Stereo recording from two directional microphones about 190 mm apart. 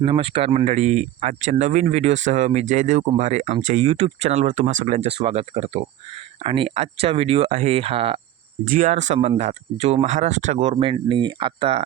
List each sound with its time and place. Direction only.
0.0 s speech: 25° right (ahead or behind)
8.6 s speech: 45° right (ahead or behind); by 11.8 s 25° right (ahead or behind)